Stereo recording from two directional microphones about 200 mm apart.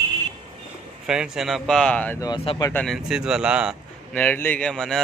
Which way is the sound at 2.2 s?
20° left (ahead or behind).